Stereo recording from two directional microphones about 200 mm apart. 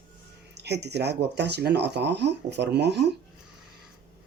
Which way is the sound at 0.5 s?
55° right (ahead or behind).